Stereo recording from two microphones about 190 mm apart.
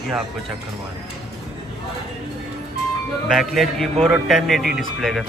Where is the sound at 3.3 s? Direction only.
Centre (ahead or behind).